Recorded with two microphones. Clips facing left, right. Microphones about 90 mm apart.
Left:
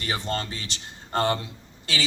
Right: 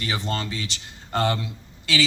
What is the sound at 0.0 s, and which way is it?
Speech, 40° left (ahead or behind).